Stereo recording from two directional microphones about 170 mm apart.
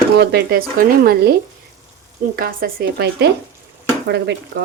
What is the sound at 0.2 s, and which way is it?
Speech, 75° right (ahead or behind).